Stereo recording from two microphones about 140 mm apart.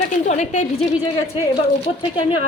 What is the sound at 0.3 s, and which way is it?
Speech, 60° left (ahead or behind).